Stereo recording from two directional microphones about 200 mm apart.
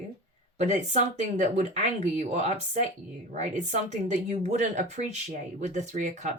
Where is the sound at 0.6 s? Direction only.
35° right (ahead or behind).